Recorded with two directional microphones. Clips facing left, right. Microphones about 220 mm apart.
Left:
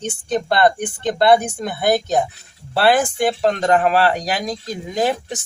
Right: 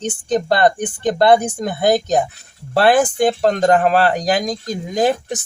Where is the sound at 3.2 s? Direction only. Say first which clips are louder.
Right 3 dB; 45° right (ahead or behind).